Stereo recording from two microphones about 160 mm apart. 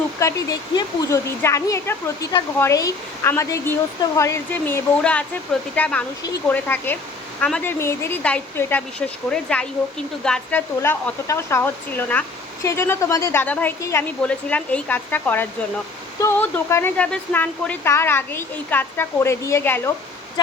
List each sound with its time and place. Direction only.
0.2 s speech: 20° left (ahead or behind); by 10.6 s 5° left (ahead or behind)
10.8 s speech: 15° left (ahead or behind)